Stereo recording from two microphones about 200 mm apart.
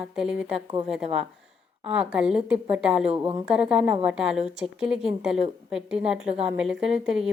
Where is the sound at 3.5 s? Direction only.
5° right (ahead or behind).